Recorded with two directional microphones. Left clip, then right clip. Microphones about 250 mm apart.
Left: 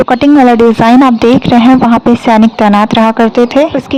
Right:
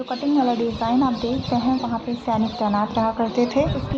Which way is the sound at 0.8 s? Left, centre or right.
Left.